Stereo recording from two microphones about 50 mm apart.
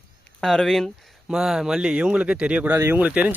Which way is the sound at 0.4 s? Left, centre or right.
Centre.